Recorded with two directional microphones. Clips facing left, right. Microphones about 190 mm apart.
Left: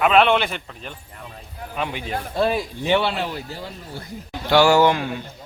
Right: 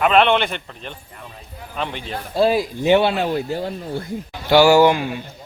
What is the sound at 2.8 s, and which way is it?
Speech, 40° right (ahead or behind).